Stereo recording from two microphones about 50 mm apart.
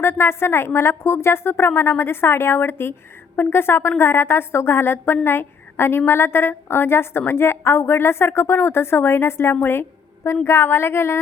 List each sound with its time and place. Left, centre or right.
0.0 s a woman's voice: left